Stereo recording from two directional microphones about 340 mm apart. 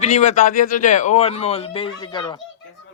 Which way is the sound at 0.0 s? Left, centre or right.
Centre.